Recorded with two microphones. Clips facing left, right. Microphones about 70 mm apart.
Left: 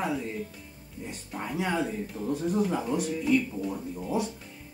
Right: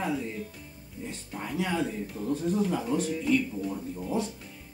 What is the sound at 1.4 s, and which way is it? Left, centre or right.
Speech, centre.